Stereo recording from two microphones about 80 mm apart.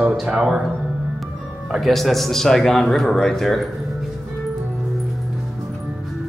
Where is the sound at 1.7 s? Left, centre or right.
Centre.